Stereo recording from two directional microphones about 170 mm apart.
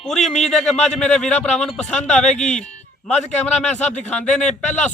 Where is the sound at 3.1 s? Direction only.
40° left (ahead or behind).